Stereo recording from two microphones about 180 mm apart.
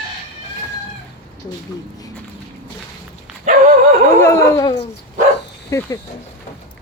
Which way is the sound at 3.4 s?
50° right (ahead or behind).